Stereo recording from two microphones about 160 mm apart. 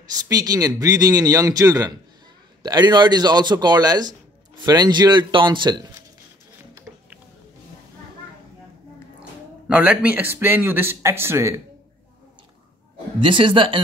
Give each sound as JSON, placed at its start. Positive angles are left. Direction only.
{"t": 0.0, "sound": "a man's voice", "side_deg": -25}
{"t": 9.7, "sound": "speech", "side_deg": -10}
{"t": 13.2, "sound": "speech", "side_deg": -30}